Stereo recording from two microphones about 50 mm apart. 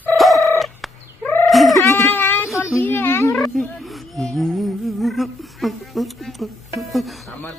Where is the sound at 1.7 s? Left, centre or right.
Left.